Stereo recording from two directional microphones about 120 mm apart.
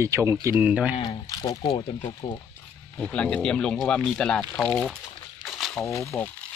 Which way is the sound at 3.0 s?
10° left (ahead or behind).